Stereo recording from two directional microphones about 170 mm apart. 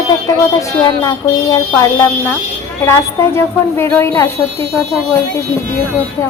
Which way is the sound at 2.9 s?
15° left (ahead or behind).